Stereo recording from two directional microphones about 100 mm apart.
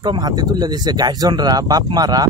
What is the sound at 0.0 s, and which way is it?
Speech, 45° right (ahead or behind).